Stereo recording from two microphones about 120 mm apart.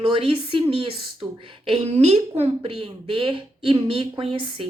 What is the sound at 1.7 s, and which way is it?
A woman's voice, 60° right (ahead or behind).